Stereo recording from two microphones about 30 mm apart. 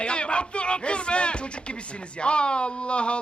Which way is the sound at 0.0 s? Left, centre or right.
Left.